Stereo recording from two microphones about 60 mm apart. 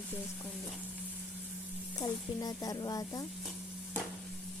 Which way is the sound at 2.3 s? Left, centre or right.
Left.